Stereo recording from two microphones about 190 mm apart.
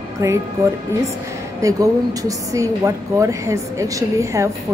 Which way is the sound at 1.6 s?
20° right (ahead or behind).